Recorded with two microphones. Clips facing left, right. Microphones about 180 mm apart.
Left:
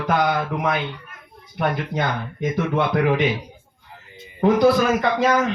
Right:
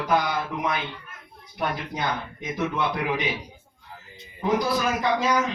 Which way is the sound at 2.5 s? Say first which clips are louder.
Left 5 dB; 60° left (ahead or behind).